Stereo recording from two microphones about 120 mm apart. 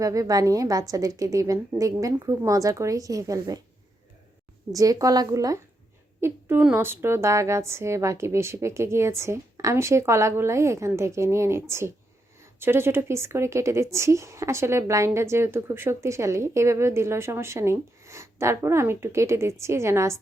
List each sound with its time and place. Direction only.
0.0 s a woman's voice: 30° right (ahead or behind)
4.7 s a woman's voice: 30° right (ahead or behind)